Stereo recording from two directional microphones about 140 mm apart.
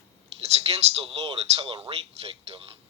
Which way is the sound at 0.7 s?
45° right (ahead or behind).